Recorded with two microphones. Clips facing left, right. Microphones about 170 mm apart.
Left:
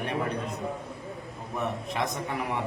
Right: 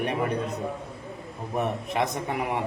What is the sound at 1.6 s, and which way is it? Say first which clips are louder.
Speech: right 4 dB; 20° right (ahead or behind).